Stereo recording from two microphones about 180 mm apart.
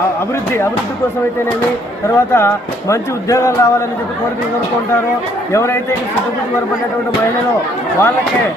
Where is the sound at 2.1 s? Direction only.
15° left (ahead or behind).